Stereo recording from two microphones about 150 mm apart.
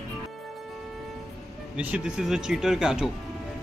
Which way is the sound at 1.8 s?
5° right (ahead or behind).